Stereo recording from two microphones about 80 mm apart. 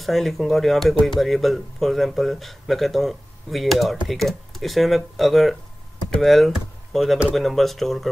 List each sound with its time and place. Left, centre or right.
0.0 s speech: centre